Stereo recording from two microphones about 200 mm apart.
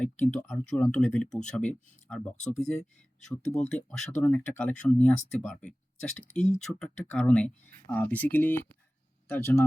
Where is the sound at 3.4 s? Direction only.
35° left (ahead or behind).